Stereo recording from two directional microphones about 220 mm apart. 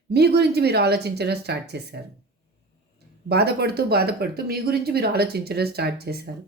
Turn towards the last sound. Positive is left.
turn(degrees=-45)  # may be behind; listen again after turning